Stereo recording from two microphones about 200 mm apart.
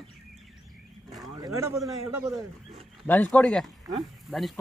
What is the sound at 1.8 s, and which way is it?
Speech, 15° right (ahead or behind).